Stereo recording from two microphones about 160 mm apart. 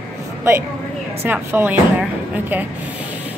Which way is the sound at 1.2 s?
10° right (ahead or behind).